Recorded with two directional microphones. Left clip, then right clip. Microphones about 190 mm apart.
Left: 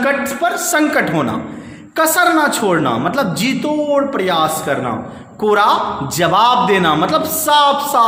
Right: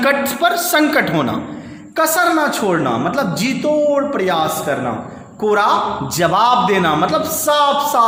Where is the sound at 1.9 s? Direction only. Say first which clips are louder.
Left 2 dB; 20° left (ahead or behind).